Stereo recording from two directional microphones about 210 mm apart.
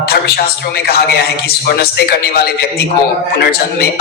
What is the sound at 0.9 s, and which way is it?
A man's voice, 50° left (ahead or behind).